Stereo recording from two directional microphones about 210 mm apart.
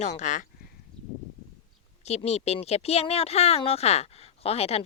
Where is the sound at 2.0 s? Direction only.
30° left (ahead or behind).